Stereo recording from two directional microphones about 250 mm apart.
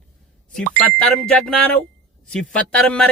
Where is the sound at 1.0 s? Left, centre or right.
Centre.